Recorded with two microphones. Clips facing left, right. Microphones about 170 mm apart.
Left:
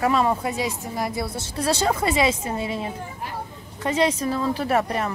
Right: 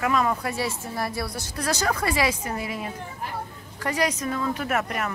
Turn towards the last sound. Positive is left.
turn(degrees=30)  # may be behind; listen again after turning